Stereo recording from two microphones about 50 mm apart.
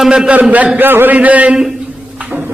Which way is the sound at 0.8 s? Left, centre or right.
Right.